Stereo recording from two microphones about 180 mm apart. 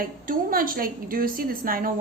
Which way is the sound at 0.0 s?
50° right (ahead or behind).